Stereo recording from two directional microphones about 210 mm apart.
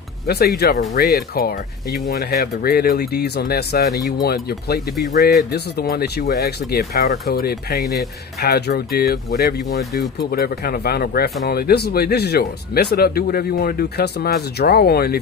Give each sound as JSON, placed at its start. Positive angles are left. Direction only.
{"t": 0.6, "sound": "speech", "side_deg": 50}